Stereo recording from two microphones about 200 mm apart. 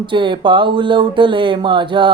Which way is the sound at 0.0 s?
25° right (ahead or behind).